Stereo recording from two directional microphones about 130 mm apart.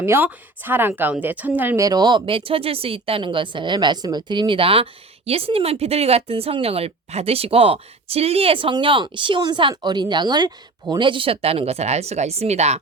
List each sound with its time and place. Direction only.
0.0 s a woman's voice: 15° right (ahead or behind); by 12.8 s 55° right (ahead or behind)